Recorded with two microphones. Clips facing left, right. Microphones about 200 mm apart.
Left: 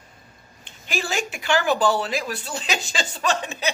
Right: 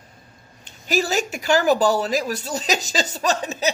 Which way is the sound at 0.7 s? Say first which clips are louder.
Right 6 dB; 40° right (ahead or behind).